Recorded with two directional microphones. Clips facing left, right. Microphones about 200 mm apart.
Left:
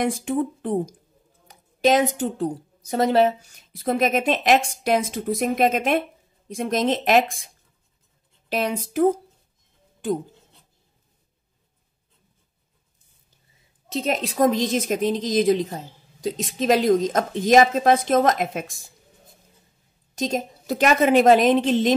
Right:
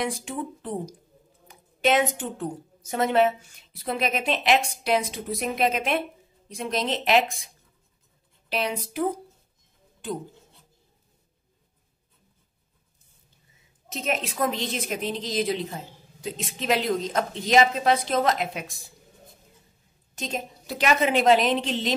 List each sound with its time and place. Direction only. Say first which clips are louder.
0.0 s a woman's voice: left 7 dB; 50° left (ahead or behind)
1.5 s a woman's voice: left 4 dB; 40° left (ahead or behind)
8.5 s a woman's voice: left 4 dB; 45° left (ahead or behind)
13.8 s a woman's voice: left 4 dB; 35° left (ahead or behind)
20.2 s a woman's voice: left 7 dB; 40° left (ahead or behind)